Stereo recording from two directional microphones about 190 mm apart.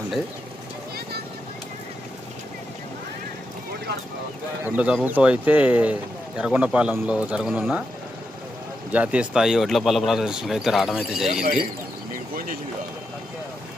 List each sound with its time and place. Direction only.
4.6 s speech: 10° right (ahead or behind)
8.9 s speech: 5° right (ahead or behind)
12.1 s a sound: 45° right (ahead or behind)